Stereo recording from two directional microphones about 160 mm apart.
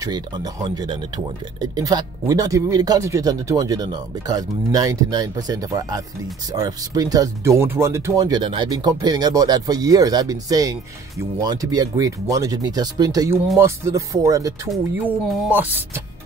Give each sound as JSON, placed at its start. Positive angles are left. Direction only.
{"t": 0.0, "sound": "speech", "side_deg": -25}